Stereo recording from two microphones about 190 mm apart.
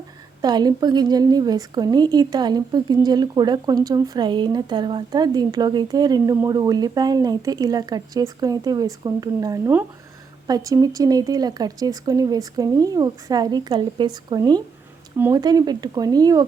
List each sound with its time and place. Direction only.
0.4 s speech: 20° right (ahead or behind)